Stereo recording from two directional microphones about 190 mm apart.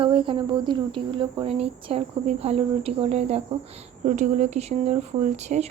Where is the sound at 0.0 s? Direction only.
30° right (ahead or behind).